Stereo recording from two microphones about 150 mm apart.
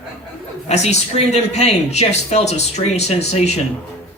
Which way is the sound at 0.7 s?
45° left (ahead or behind).